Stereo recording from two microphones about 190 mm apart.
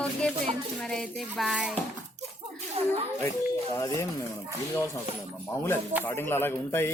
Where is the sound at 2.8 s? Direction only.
30° right (ahead or behind).